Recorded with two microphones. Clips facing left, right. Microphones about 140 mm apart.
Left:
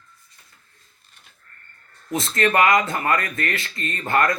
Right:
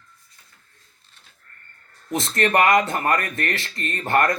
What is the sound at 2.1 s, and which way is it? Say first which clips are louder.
Speech: even; 25° right (ahead or behind).